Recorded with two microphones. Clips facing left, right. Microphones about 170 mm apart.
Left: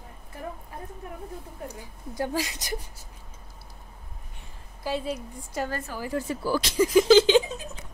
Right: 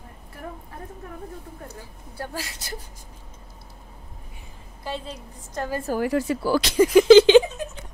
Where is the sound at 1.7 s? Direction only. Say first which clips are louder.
Left 2 dB; 15° left (ahead or behind).